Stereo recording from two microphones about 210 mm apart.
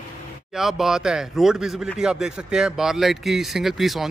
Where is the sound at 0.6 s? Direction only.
Centre (ahead or behind).